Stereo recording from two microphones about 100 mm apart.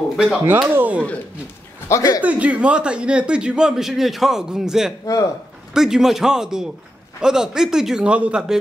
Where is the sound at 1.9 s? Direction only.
35° left (ahead or behind).